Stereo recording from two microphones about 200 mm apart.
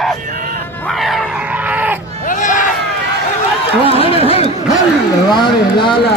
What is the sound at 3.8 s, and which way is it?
Chatter, 30° left (ahead or behind).